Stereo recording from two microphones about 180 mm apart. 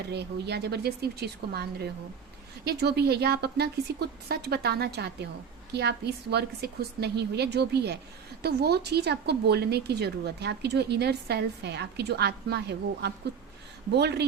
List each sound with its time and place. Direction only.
0.1 s a woman's voice: 65° right (ahead or behind)